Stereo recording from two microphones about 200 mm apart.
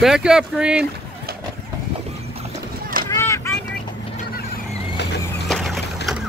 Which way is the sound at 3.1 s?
15° left (ahead or behind).